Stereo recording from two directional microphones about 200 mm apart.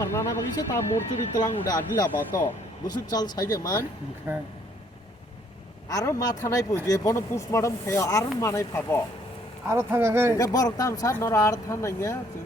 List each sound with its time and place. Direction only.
0.0 s speech: 15° left (ahead or behind)
4.3 s speech: 10° right (ahead or behind)
5.9 s speech: 20° left (ahead or behind)
9.6 s speech: 10° right (ahead or behind)
10.3 s speech: 15° left (ahead or behind)